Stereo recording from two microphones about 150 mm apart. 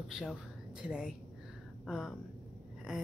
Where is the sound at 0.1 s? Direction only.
Centre (ahead or behind).